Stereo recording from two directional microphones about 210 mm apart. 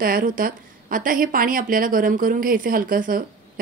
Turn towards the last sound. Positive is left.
turn(degrees=-40)  # may be behind; listen again after turning